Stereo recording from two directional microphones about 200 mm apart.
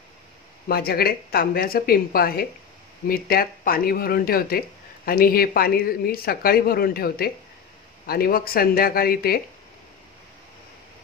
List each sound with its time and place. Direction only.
0.7 s speech: 50° left (ahead or behind)